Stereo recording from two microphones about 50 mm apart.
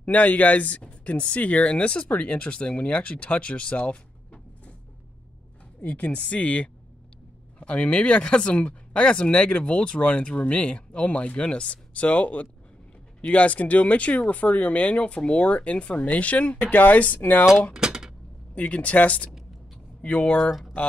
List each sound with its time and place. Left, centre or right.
0.0 s speech: left
5.9 s speech: left
17.7 s a sound: centre
18.5 s speech: left